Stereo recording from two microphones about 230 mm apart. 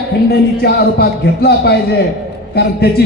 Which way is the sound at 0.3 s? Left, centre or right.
Left.